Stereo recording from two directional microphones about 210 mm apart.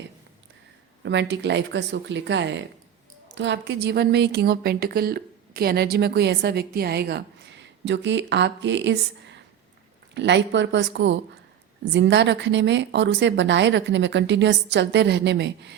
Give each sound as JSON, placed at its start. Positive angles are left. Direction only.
{"t": 1.0, "sound": "a woman's voice", "side_deg": -55}